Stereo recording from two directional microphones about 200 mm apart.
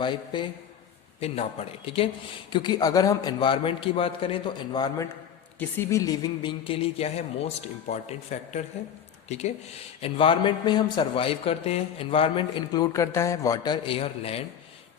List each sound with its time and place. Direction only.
0.0 s a man's voice: 25° left (ahead or behind)